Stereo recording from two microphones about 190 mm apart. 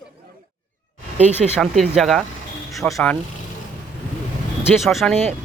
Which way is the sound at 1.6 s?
Centre (ahead or behind).